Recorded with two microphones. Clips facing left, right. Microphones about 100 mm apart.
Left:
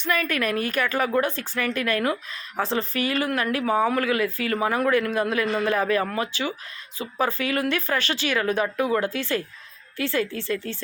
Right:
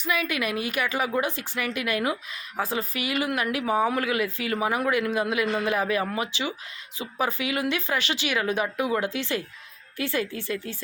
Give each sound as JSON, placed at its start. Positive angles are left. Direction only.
{"t": 0.0, "sound": "speech", "side_deg": -10}